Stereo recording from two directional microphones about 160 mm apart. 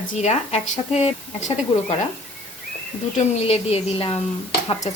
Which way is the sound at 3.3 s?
40° left (ahead or behind).